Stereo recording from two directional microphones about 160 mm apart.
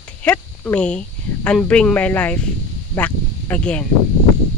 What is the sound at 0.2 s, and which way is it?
Speech, 10° left (ahead or behind).